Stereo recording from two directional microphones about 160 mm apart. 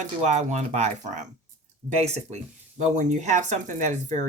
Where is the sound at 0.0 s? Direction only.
45° right (ahead or behind).